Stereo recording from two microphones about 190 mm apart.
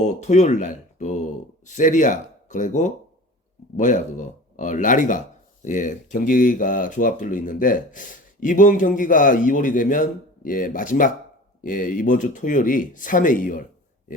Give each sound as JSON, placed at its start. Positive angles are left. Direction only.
{"t": 0.0, "sound": "speech", "side_deg": 40}